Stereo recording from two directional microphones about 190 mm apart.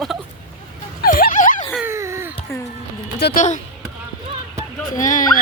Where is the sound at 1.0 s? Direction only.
50° left (ahead or behind).